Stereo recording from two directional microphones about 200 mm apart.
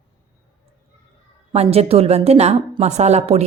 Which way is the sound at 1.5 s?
30° right (ahead or behind).